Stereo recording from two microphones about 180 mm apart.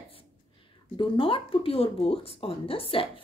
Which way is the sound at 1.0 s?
30° left (ahead or behind).